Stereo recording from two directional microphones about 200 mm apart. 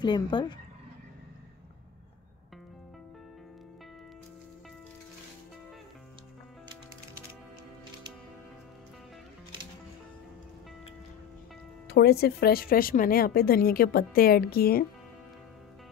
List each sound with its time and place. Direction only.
0.0 s speech: 20° left (ahead or behind)
11.9 s a woman's voice: 55° left (ahead or behind)